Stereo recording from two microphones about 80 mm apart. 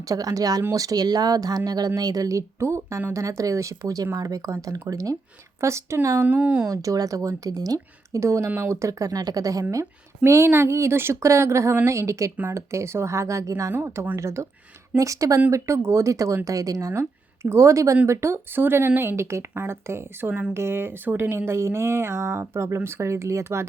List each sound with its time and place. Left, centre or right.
0.0 s speech: right
5.5 s speech: right
6.2 s speech: right
6.7 s speech: right
8.2 s speech: right
10.2 s speech: right
13.7 s speech: right